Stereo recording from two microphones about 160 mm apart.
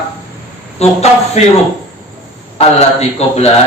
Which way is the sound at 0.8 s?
40° left (ahead or behind).